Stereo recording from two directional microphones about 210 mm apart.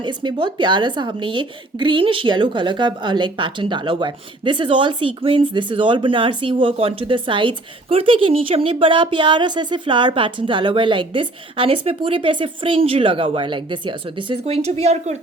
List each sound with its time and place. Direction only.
0.0 s a woman's voice: 20° right (ahead or behind)